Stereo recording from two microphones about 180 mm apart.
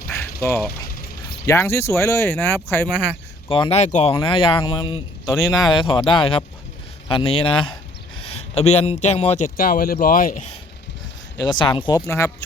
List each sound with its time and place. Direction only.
0.1 s duck: 15° left (ahead or behind)
1.5 s speech: 15° left (ahead or behind)
3.5 s speech: 30° left (ahead or behind)
4.1 s speech: 30° left (ahead or behind)
9.6 s speech: 55° left (ahead or behind)
11.3 s speech: 25° left (ahead or behind)